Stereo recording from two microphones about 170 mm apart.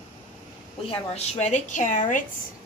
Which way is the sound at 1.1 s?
40° left (ahead or behind).